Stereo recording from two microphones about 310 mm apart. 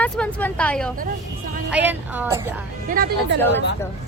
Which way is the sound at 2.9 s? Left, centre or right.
Right.